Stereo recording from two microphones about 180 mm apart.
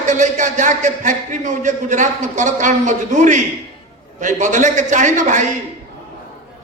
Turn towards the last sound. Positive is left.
turn(degrees=-45)  # may be behind; listen again after turning